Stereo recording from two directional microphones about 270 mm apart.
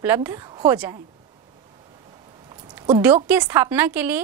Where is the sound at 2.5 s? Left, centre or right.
Centre.